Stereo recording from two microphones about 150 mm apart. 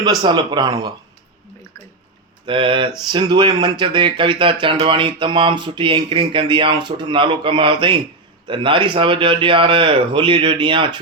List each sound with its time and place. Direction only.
0.0 s speech: 25° right (ahead or behind)
2.5 s speech: 35° right (ahead or behind)